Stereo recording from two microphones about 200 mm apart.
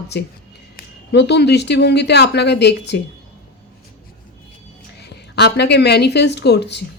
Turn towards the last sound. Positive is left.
turn(degrees=60)  # may be behind; listen again after turning